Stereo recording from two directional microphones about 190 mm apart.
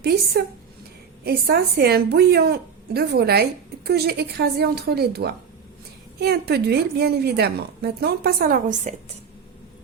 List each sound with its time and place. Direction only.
0.0 s a woman's voice: 60° right (ahead or behind)